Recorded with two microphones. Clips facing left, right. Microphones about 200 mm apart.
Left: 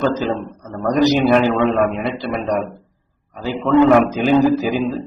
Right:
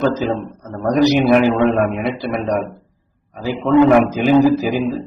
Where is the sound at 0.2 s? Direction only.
10° right (ahead or behind).